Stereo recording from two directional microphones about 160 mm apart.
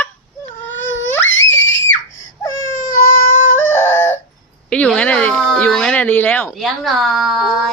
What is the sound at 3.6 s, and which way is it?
Fowl, 15° left (ahead or behind).